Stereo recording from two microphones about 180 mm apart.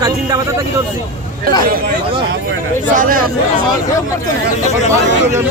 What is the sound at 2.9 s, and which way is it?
Speech, 50° right (ahead or behind).